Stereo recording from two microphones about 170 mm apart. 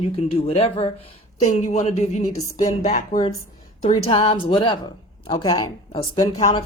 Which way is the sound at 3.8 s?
35° left (ahead or behind).